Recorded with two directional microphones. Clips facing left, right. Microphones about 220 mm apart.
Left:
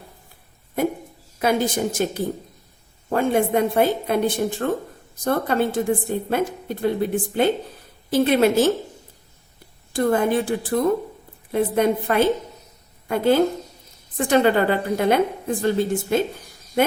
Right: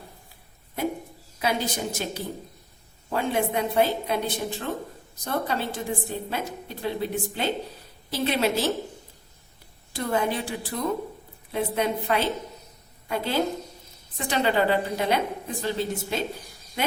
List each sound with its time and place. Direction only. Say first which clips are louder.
1.4 s a woman's voice: left 7 dB; 50° left (ahead or behind)
9.9 s a woman's voice: left 7 dB; 50° left (ahead or behind)